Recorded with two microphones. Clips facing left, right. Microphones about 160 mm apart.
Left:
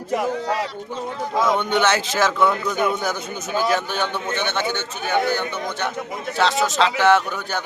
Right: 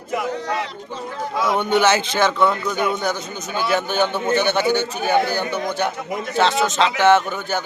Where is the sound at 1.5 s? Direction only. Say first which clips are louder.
Right 3 dB; 10° right (ahead or behind); by 3.4 s 5° left (ahead or behind).